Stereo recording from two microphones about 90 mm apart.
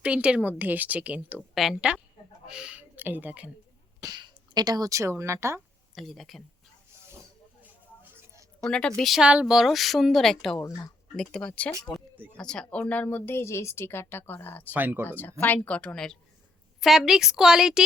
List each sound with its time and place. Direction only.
0.0 s speech: 10° right (ahead or behind)
1.5 s speech: 5° right (ahead or behind)
4.0 s speech: 50° right (ahead or behind); by 5.5 s 30° right (ahead or behind)
5.9 s a woman's voice: centre (ahead or behind)
8.6 s a woman's voice: 10° left (ahead or behind)
9.2 s a woman's voice: 10° right (ahead or behind); by 14.7 s 25° left (ahead or behind)
14.7 s speech: 20° right (ahead or behind)
15.0 s speech: 20° left (ahead or behind)
16.8 s a woman's voice: 5° right (ahead or behind)